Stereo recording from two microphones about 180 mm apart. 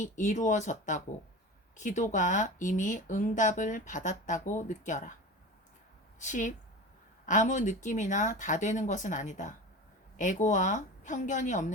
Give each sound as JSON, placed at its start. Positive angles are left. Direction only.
{"t": 0.0, "sound": "speech", "side_deg": 40}
{"t": 6.1, "sound": "speech", "side_deg": 45}